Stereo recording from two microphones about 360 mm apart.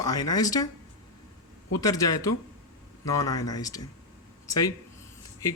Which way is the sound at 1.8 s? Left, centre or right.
Centre.